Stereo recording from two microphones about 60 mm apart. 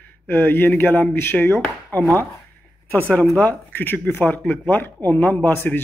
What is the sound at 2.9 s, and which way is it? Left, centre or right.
A man's voice, left.